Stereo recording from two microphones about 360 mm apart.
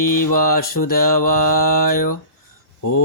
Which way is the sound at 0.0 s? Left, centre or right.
Left.